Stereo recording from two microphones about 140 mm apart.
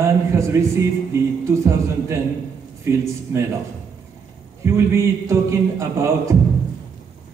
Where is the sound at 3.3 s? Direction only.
20° right (ahead or behind).